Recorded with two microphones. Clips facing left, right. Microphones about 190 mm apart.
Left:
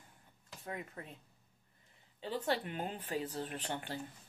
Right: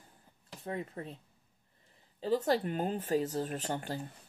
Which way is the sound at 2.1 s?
40° right (ahead or behind).